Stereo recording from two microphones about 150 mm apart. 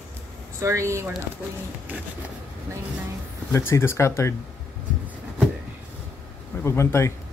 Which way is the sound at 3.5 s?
15° left (ahead or behind).